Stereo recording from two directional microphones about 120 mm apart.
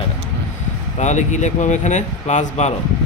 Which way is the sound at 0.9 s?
80° left.